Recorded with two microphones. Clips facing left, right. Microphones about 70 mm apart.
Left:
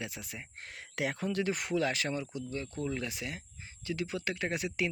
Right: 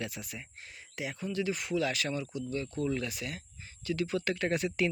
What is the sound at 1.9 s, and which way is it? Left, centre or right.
Speech, left.